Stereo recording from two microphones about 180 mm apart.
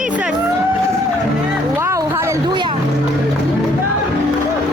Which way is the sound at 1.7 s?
15° right (ahead or behind).